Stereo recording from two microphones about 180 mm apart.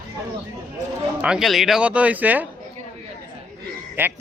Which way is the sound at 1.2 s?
5° right (ahead or behind).